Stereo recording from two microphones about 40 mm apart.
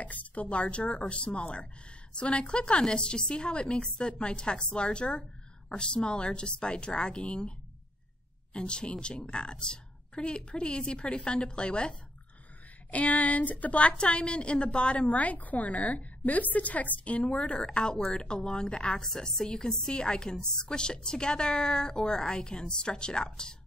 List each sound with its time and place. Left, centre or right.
0.0 s a woman's voice: left
8.5 s a woman's voice: left
12.9 s a woman's voice: left
15.0 s a woman's voice: left
17.6 s a woman's voice: centre
19.0 s a woman's voice: centre